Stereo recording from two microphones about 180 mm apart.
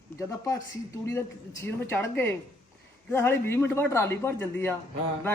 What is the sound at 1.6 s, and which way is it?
Speech, 15° left (ahead or behind).